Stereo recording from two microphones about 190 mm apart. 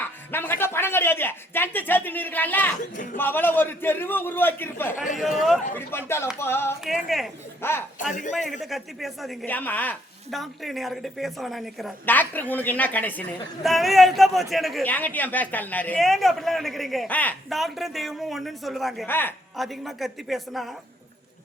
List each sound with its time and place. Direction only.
0.0 s a sound: 10° left (ahead or behind)
2.9 s speech: 45° left (ahead or behind)
3.2 s a man's voice: 10° left (ahead or behind)
5.2 s a woman's voice: centre (ahead or behind)
5.7 s a man's voice: 10° left (ahead or behind)
8.4 s a woman's voice: centre (ahead or behind)
19.0 s a man's voice: 10° left (ahead or behind)
19.5 s a woman's voice: centre (ahead or behind)